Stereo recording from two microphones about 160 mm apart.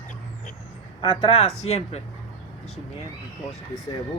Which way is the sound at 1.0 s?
35° left (ahead or behind).